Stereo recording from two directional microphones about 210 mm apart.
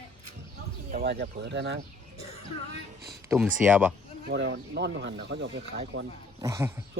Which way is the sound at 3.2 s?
10° right (ahead or behind).